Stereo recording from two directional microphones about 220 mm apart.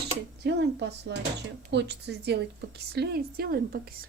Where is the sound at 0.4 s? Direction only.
50° right (ahead or behind).